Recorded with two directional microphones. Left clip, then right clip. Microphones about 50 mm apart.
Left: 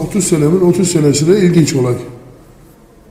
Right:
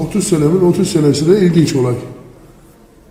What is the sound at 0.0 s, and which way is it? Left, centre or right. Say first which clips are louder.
A man's voice: left 1 dB; left.